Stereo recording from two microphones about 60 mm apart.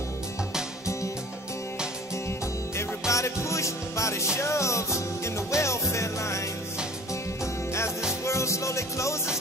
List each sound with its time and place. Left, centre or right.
3.1 s music: left
8.3 s music: left